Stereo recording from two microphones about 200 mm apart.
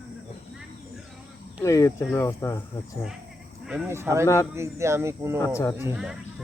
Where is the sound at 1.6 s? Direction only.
15° left (ahead or behind).